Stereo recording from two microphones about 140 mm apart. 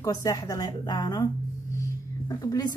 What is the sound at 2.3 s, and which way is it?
Speech, 25° left (ahead or behind).